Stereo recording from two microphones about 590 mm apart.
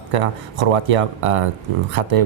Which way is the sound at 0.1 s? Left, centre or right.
Right.